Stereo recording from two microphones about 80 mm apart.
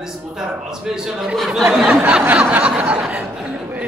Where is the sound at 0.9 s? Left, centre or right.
Centre.